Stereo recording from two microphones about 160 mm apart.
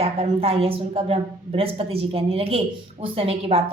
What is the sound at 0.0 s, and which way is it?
A woman's voice, 40° right (ahead or behind).